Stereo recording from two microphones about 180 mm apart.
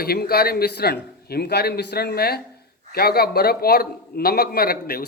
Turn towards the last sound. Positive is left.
turn(degrees=55)  # may be behind; listen again after turning